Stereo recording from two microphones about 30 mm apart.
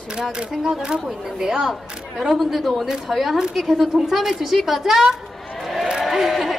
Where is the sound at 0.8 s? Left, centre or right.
Right.